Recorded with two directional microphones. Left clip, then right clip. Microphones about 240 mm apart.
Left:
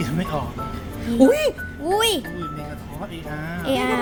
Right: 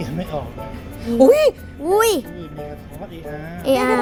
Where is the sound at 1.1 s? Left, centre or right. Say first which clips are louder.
Right 5 dB; centre.